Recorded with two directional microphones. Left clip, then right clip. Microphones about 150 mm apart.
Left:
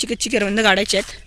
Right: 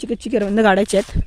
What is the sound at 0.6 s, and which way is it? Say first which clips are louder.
Speech: right 2 dB; 55° right (ahead or behind).